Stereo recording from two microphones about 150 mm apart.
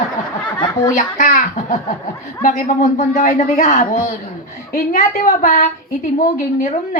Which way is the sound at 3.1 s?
55° left (ahead or behind).